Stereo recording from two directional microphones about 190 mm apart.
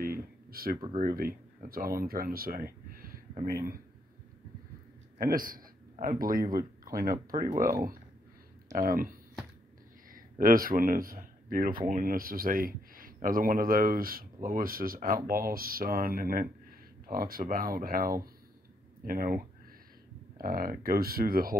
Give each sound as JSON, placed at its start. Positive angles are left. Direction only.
{"t": 0.0, "sound": "a sound", "side_deg": -50}
{"t": 0.9, "sound": "speech", "side_deg": -50}
{"t": 5.2, "sound": "speech", "side_deg": -50}
{"t": 8.7, "sound": "speech", "side_deg": -50}
{"t": 10.4, "sound": "speech", "side_deg": -50}